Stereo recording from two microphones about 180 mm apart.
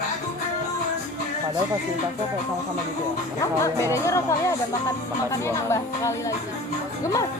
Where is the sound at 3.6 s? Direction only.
15° left (ahead or behind).